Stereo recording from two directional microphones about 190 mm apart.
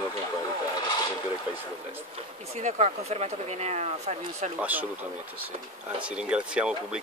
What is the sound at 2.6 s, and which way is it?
Speech, 35° right (ahead or behind).